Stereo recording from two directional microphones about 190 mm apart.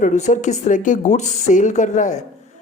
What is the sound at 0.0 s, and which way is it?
A woman's voice, 40° left (ahead or behind).